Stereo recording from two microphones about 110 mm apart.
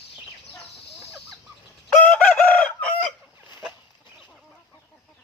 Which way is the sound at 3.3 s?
20° right (ahead or behind).